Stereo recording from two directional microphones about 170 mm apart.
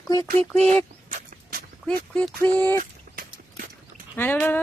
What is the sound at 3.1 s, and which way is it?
Horse, 55° right (ahead or behind).